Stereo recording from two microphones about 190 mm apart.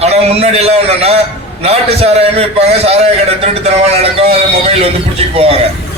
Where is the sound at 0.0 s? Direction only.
30° right (ahead or behind).